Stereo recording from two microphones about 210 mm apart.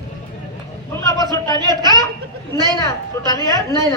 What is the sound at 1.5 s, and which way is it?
Speech, 20° right (ahead or behind).